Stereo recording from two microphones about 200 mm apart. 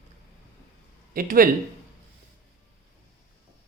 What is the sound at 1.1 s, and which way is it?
Speech, 45° right (ahead or behind).